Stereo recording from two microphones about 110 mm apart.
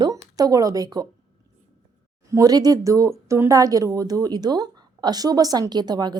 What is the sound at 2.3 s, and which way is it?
Speech, 35° right (ahead or behind).